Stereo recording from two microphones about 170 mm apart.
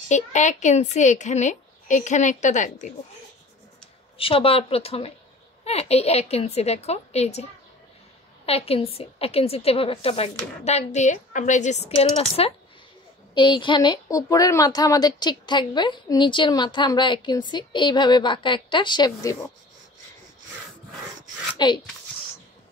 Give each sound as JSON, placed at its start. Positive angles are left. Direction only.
{"t": 0.1, "sound": "a woman's voice", "side_deg": 45}
{"t": 4.2, "sound": "a woman's voice", "side_deg": 35}
{"t": 8.5, "sound": "a woman's voice", "side_deg": 35}
{"t": 21.6, "sound": "a woman's voice", "side_deg": 25}